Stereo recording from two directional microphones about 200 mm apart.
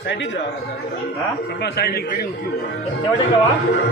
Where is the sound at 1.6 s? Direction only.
55° left (ahead or behind).